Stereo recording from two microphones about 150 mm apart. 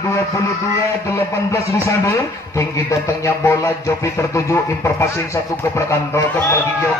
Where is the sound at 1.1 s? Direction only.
20° left (ahead or behind).